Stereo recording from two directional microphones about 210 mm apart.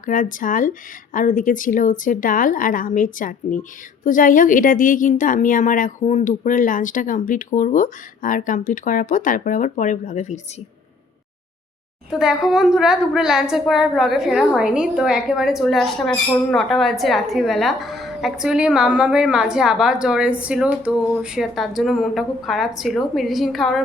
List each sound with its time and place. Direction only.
0.0 s speech: 40° left (ahead or behind)
12.2 s a woman's voice: centre (ahead or behind)